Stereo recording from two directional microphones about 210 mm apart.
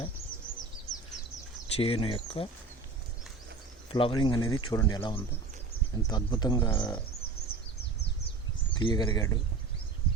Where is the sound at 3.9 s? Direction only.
25° left (ahead or behind).